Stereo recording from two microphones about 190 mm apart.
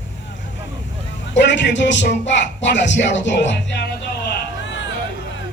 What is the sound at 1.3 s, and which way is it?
Speech, 70° left (ahead or behind).